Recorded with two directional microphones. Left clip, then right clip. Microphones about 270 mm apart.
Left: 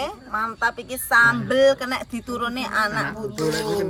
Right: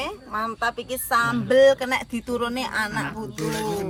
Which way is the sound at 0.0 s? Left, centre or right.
Right.